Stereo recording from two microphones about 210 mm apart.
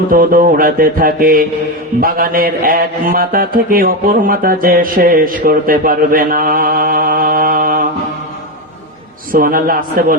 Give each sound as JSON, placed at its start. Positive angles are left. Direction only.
{"t": 0.1, "sound": "a man's voice", "side_deg": -40}
{"t": 9.3, "sound": "a man's voice", "side_deg": -40}